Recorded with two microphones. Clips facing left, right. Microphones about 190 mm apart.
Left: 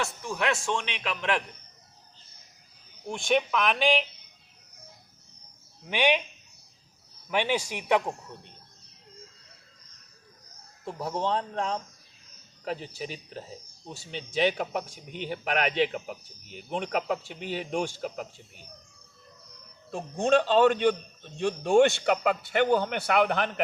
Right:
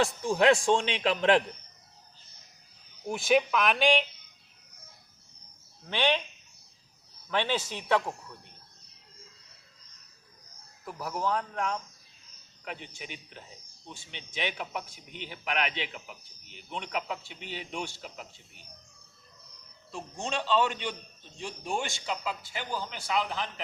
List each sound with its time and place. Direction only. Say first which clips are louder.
0.0 s a man's voice: right 6 dB; 30° right (ahead or behind)
3.1 s speech: right 1 dB; 5° right (ahead or behind)
5.8 s a man's voice: left 3 dB; 15° left (ahead or behind)
7.3 s a man's voice: left 2 dB; 15° left (ahead or behind)
10.8 s speech: left 2 dB; 30° left (ahead or behind); by 18.6 s 45° left (ahead or behind)
19.9 s speech: left 12 dB; 55° left (ahead or behind)
21.3 s a man's voice: left 13 dB; 65° left (ahead or behind)